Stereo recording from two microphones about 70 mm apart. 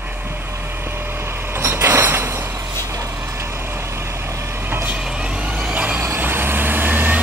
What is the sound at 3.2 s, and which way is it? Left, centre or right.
Vehicle, right.